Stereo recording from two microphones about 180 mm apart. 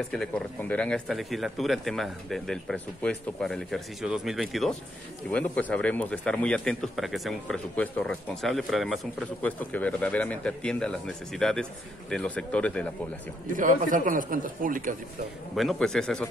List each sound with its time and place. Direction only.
0.1 s speech: 5° left (ahead or behind)
13.5 s a man's voice: 45° right (ahead or behind)
15.5 s speech: centre (ahead or behind)